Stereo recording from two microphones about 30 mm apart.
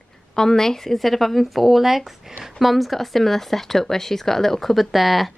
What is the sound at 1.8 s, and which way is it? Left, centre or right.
A woman's voice, centre.